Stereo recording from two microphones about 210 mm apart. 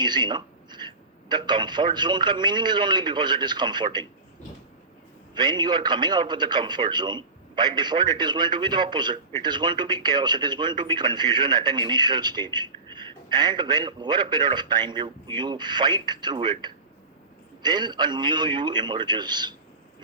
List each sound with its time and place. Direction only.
0.0 s a man's voice: 20° right (ahead or behind)
5.3 s a man's voice: 20° right (ahead or behind)
17.6 s a man's voice: 20° right (ahead or behind)